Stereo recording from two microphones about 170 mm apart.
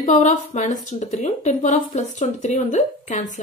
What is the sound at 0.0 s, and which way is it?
A woman's voice, 45° left (ahead or behind).